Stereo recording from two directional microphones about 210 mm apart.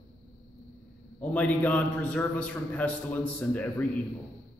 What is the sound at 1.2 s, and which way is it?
A man's voice, 5° left (ahead or behind).